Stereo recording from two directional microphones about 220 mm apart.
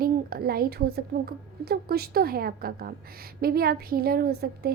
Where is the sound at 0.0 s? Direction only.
45° right (ahead or behind).